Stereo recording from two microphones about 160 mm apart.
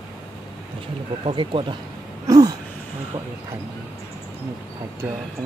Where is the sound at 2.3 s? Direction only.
25° right (ahead or behind).